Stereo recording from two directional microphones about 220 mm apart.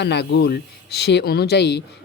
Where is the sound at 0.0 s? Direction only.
50° left (ahead or behind).